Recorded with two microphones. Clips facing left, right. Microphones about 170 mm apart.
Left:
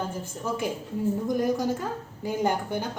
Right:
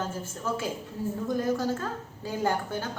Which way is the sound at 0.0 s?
15° left (ahead or behind).